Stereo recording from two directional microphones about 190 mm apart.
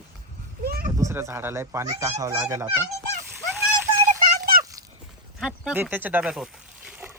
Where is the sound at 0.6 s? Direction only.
55° right (ahead or behind).